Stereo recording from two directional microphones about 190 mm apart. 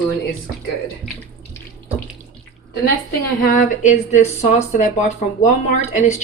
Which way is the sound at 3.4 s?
45° left (ahead or behind).